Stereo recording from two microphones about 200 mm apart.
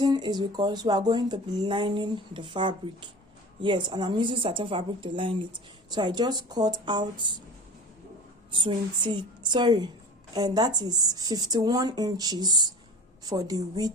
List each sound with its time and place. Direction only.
0.0 s speech: 20° right (ahead or behind)
8.5 s speech: 25° right (ahead or behind)